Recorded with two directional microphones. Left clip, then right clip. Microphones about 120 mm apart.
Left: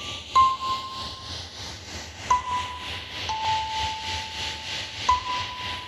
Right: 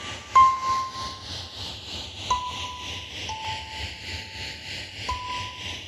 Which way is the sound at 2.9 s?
65° left (ahead or behind).